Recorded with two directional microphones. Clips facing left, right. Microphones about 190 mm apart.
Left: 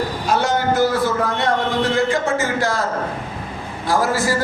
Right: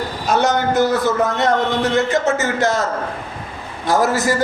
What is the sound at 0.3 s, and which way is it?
A man's voice, 20° right (ahead or behind).